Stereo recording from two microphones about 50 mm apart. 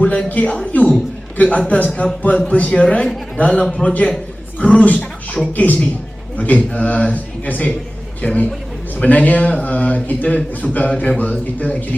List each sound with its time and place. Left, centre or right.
0.0 s a man's voice: left